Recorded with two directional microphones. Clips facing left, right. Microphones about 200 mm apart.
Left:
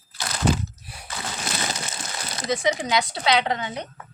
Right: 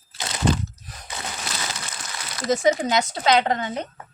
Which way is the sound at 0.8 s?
10° left (ahead or behind).